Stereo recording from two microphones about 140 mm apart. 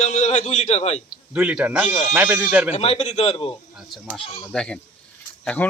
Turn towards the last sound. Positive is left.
turn(degrees=10)  # may be behind; listen again after turning